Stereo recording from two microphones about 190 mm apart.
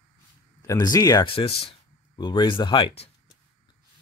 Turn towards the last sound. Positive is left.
turn(degrees=25)  # may be behind; listen again after turning